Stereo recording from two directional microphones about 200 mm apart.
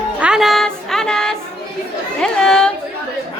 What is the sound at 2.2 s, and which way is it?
Speech, 5° left (ahead or behind).